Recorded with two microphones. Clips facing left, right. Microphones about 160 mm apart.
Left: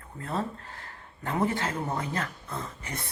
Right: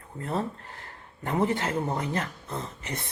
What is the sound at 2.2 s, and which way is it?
Speech, 25° right (ahead or behind).